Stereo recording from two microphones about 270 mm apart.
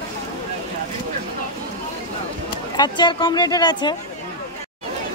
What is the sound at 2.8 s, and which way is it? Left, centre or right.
Speech, centre.